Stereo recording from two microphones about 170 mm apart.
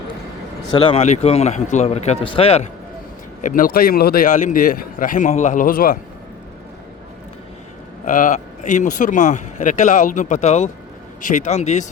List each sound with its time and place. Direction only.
0.7 s a man's voice: 30° left (ahead or behind)
1.0 s a man's voice: 40° left (ahead or behind)
3.4 s speech: 55° left (ahead or behind)
8.0 s speech: 50° left (ahead or behind)